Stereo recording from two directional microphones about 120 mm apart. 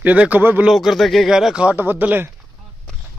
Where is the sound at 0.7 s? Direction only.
Centre (ahead or behind).